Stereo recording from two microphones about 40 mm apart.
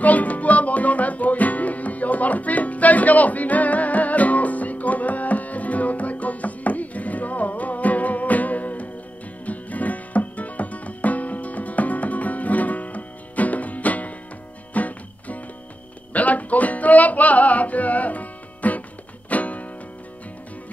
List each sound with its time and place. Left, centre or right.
0.0 s music: left